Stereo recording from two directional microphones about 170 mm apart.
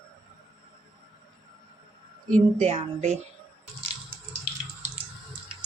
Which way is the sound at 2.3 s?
40° right (ahead or behind).